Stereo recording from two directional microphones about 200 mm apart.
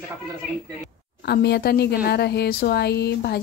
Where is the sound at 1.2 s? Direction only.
55° left (ahead or behind).